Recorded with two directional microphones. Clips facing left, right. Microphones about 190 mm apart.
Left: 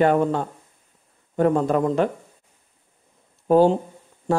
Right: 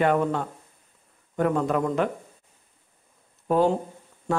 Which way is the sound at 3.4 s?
30° left (ahead or behind).